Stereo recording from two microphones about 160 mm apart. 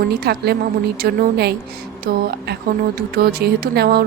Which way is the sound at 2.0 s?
90° right.